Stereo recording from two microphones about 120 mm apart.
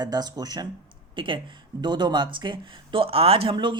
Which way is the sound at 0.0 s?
35° right (ahead or behind).